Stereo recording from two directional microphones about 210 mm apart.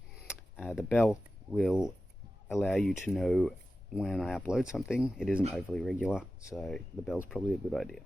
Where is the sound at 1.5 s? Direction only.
Centre (ahead or behind).